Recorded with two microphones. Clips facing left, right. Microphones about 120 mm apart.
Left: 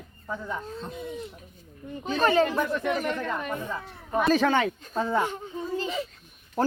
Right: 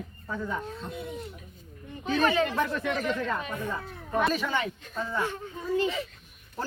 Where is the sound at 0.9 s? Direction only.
Centre (ahead or behind).